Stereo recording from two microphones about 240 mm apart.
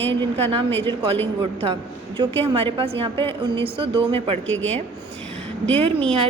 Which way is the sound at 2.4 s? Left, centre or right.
Right.